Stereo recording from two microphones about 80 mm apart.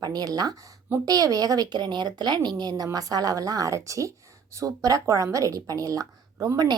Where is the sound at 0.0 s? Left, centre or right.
Right.